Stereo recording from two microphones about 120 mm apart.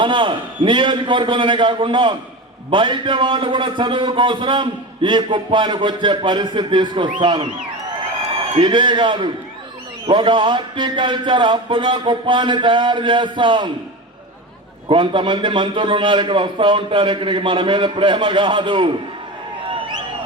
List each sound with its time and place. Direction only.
0.0 s a man's voice: 45° right (ahead or behind)
8.5 s a man's voice: 40° right (ahead or behind)
14.8 s a man's voice: 40° right (ahead or behind)
19.6 s a sound: 45° right (ahead or behind)